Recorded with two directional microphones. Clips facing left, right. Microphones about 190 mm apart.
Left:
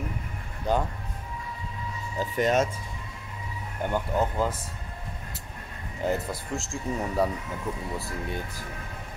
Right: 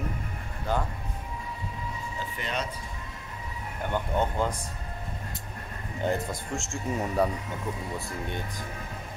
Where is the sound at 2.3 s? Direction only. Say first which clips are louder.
Left 11 dB; 45° left (ahead or behind).